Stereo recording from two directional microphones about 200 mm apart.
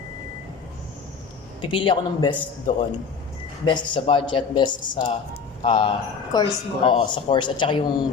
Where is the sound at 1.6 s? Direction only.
25° left (ahead or behind).